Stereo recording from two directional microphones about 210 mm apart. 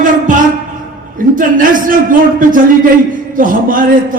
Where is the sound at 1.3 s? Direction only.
40° right (ahead or behind).